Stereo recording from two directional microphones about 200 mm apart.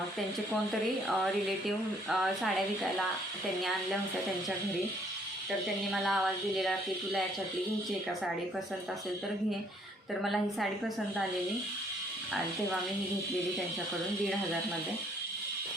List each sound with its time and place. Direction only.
1.0 s speech: centre (ahead or behind)
5.9 s speech: centre (ahead or behind)
10.2 s speech: centre (ahead or behind)